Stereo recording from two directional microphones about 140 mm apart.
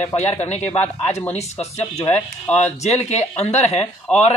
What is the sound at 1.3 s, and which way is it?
Speech, 50° left (ahead or behind).